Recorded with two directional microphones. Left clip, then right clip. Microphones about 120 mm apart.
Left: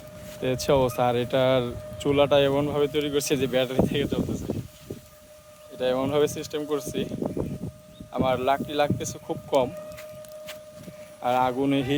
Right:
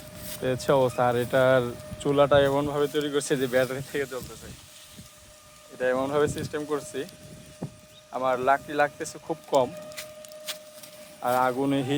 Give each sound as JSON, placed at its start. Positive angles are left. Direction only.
{"t": 0.4, "sound": "speech", "side_deg": 30}
{"t": 5.8, "sound": "speech", "side_deg": 35}
{"t": 8.1, "sound": "speech", "side_deg": 25}
{"t": 11.2, "sound": "speech", "side_deg": 30}